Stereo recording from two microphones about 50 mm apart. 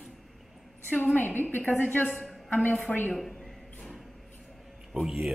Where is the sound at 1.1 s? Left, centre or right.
Left.